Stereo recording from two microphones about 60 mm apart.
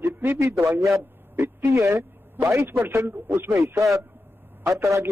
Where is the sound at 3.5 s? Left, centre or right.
Right.